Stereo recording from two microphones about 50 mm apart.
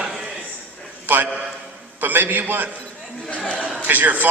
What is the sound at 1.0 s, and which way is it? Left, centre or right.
A man's voice, right.